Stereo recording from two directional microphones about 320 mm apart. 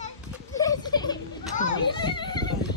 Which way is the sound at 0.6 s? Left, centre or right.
Centre.